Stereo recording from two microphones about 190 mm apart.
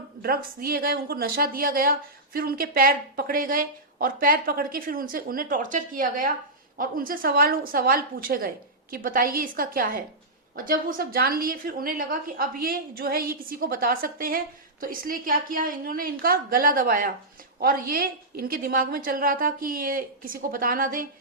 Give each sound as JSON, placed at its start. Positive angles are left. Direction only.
{"t": 0.2, "sound": "a woman's voice", "side_deg": -50}